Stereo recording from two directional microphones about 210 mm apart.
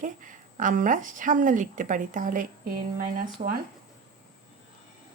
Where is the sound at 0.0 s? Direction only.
40° right (ahead or behind).